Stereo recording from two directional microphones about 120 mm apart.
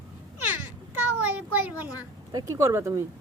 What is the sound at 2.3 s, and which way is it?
Speech, 30° right (ahead or behind).